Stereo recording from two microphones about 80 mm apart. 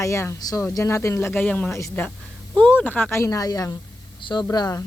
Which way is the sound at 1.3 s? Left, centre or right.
Centre.